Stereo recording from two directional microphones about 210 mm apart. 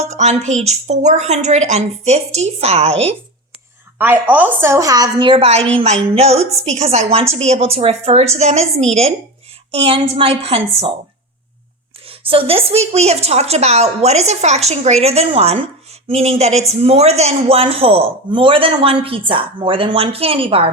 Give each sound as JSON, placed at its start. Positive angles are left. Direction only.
{"t": 0.0, "sound": "a woman's voice", "side_deg": -35}
{"t": 3.9, "sound": "a woman's voice", "side_deg": -10}
{"t": 12.0, "sound": "speech", "side_deg": -25}